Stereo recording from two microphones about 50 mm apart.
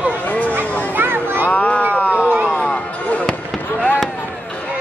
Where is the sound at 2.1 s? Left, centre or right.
Right.